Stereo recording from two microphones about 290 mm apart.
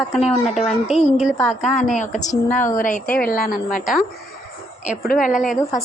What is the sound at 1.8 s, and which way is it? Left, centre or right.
A woman's voice, left.